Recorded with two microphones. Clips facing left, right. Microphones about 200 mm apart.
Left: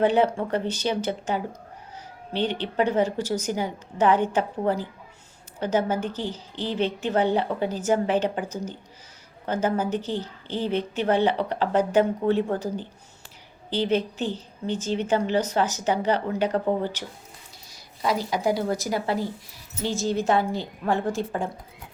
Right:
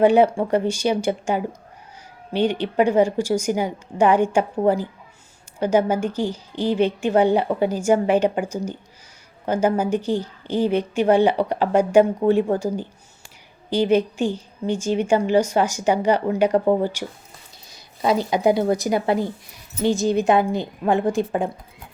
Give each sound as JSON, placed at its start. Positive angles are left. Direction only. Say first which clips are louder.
{"t": 0.0, "sound": "a woman's voice", "louder": "right 5 dB", "side_deg": -10}
{"t": 5.5, "sound": "a woman's voice", "louder": "right 5 dB", "side_deg": -10}
{"t": 17.7, "sound": "a woman's voice", "louder": "right 5 dB", "side_deg": -20}